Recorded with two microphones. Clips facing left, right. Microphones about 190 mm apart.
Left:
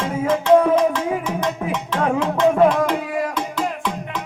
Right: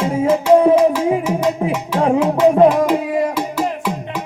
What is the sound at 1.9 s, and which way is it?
Music, 30° right (ahead or behind).